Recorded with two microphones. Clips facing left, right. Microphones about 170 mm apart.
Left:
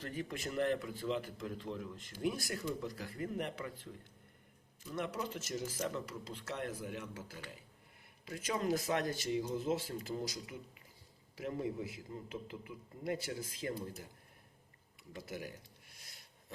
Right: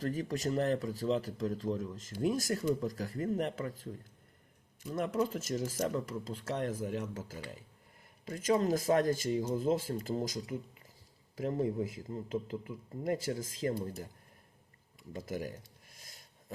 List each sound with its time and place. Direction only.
0.0 s a man's voice: 40° right (ahead or behind)
4.9 s a man's voice: 45° right (ahead or behind)
15.1 s a man's voice: 45° right (ahead or behind)